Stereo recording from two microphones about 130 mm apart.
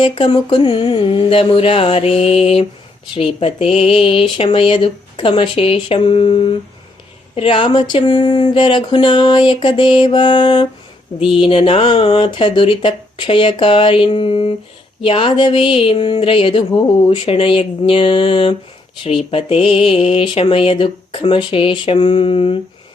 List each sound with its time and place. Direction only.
0.0 s a woman's voice: 40° left (ahead or behind)
7.3 s a sound: 45° left (ahead or behind)
11.2 s a woman's voice: 40° left (ahead or behind)